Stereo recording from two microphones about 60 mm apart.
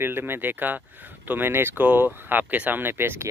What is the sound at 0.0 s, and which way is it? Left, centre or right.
Speech, right.